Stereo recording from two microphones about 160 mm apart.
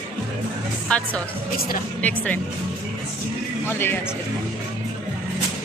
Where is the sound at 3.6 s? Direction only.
15° left (ahead or behind).